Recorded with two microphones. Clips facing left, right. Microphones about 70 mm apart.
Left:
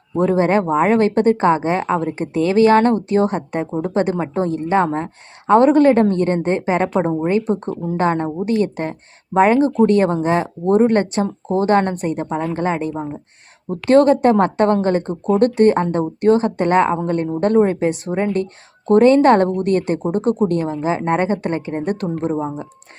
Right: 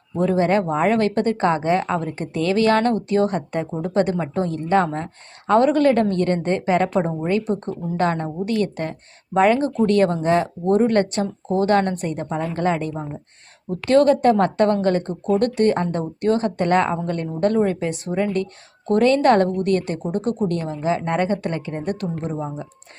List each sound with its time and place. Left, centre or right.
0.2 s speech: left
13.7 s speech: left